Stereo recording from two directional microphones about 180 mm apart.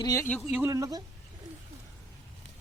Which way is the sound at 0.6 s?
15° right (ahead or behind).